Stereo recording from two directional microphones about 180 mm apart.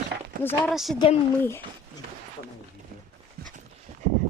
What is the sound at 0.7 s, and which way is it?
Speech, centre (ahead or behind).